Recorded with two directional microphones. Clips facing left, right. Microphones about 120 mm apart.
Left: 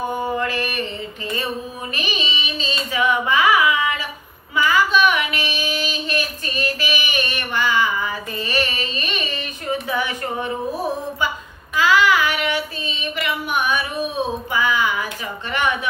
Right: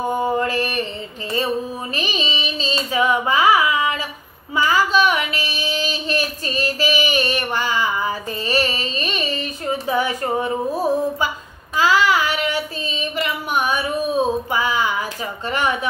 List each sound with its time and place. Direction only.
0.4 s mantra: 40° right (ahead or behind)
2.0 s carnatic music: 40° right (ahead or behind)
4.6 s child singing: 35° right (ahead or behind)
11.7 s child singing: 35° right (ahead or behind)
15.5 s a sound: 40° right (ahead or behind)